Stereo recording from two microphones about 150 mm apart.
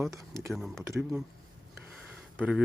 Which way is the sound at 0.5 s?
Centre (ahead or behind).